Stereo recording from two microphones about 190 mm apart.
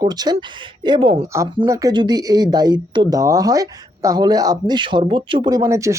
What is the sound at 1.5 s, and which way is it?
Speech, 15° right (ahead or behind).